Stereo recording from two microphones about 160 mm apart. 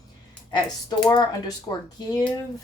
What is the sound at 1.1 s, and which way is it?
Speech, 25° left (ahead or behind).